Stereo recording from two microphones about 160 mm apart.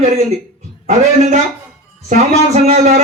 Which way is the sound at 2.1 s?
45° right (ahead or behind).